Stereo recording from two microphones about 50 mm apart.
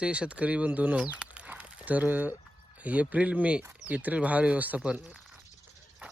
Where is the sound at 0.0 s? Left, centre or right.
Right.